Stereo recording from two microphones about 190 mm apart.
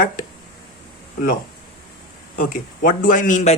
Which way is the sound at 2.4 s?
45° left (ahead or behind).